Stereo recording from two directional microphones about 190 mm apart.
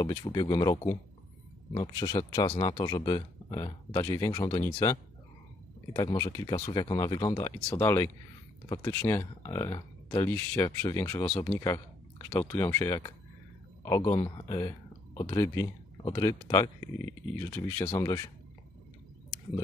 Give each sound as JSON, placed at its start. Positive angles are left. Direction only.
{"t": 0.0, "sound": "speech", "side_deg": 20}
{"t": 5.9, "sound": "speech", "side_deg": 20}